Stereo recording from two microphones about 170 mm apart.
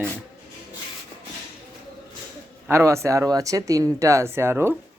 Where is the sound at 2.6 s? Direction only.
15° right (ahead or behind).